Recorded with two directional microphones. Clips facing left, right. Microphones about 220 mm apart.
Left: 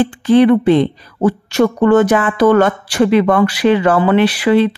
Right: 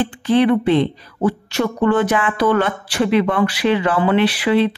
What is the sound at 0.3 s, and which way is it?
Speech, 45° left (ahead or behind).